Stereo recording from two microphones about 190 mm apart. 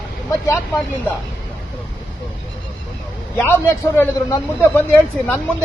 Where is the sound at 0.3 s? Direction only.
15° left (ahead or behind).